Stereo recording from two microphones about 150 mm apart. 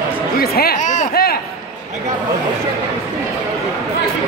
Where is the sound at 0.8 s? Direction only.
55° left (ahead or behind); by 1.3 s 75° left (ahead or behind).